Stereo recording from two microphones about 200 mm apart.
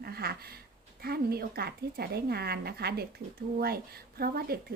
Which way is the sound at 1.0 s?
50° right (ahead or behind).